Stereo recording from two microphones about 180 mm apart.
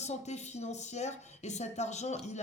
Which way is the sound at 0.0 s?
40° left (ahead or behind).